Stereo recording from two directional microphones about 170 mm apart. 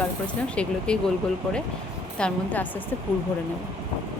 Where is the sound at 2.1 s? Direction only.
5° left (ahead or behind).